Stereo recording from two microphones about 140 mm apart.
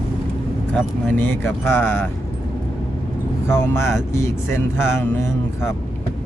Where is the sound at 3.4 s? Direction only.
15° left (ahead or behind).